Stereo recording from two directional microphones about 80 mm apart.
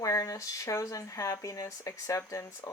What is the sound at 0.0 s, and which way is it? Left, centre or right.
Speech, left.